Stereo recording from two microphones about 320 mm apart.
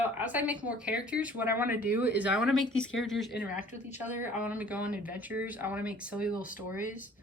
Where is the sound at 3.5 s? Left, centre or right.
Left.